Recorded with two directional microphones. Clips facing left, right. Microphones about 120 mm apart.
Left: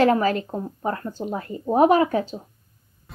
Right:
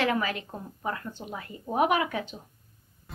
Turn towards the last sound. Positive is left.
turn(degrees=0)  # may be behind; listen again after turning